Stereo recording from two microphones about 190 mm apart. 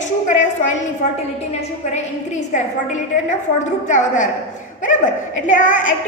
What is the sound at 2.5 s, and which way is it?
A woman's voice, 40° left (ahead or behind).